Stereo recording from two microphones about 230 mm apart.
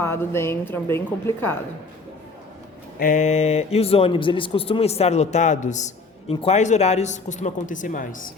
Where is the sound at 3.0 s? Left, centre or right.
Left.